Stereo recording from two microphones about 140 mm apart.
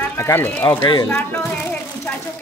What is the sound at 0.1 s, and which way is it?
A woman's voice, 15° left (ahead or behind).